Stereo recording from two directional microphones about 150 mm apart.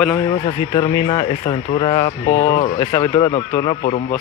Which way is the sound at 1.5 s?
30° left (ahead or behind).